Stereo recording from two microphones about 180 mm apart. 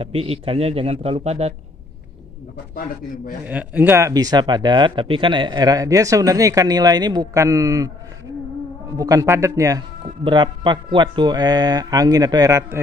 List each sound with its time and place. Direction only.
0.0 s a man's voice: 30° right (ahead or behind)
3.4 s speech: 10° right (ahead or behind)
8.9 s speech: 20° right (ahead or behind)